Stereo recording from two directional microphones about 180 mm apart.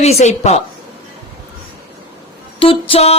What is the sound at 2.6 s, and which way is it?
Speech, 30° left (ahead or behind).